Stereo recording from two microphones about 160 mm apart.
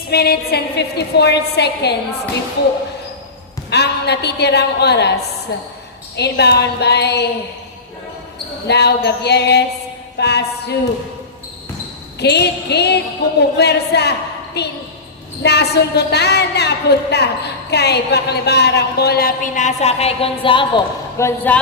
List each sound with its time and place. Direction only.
0.1 s a woman's voice: 80° left
3.7 s a woman's voice: 90° left
8.6 s a woman's voice: 90° left
10.2 s music: 90° left
12.2 s a woman's voice: 90° left; by 20.8 s 30° left (ahead or behind)
21.2 s a man's voice: 15° left (ahead or behind)